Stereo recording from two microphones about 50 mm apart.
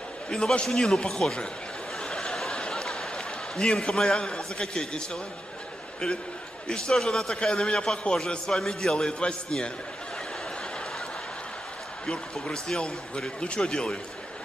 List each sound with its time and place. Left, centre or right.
0.3 s speech: centre
2.0 s a sound: centre
3.5 s speech: centre
12.1 s speech: centre